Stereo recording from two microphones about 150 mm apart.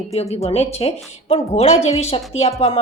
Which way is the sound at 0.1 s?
45° left (ahead or behind).